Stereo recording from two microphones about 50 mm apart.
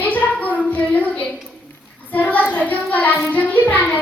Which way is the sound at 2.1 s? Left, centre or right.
Left.